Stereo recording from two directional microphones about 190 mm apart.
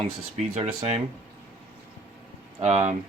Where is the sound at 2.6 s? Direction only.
35° right (ahead or behind).